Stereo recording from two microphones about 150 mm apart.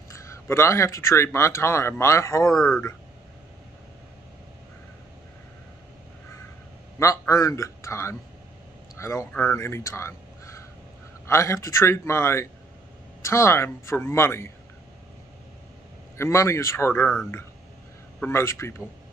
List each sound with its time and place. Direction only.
0.1 s speech: 20° left (ahead or behind)
2.5 s speech: centre (ahead or behind)
7.0 s a man's voice: 20° left (ahead or behind)
16.2 s speech: 20° left (ahead or behind)